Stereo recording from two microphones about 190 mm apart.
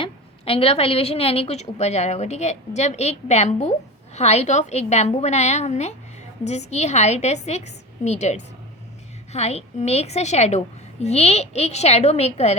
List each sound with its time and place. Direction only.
0.0 s a woman's voice: 30° left (ahead or behind)